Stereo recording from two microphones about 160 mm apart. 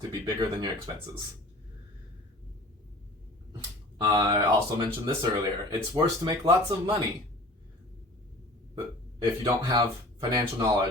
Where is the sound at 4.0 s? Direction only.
25° right (ahead or behind).